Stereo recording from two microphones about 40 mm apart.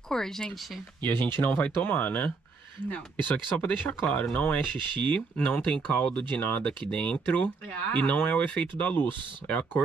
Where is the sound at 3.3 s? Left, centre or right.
Left.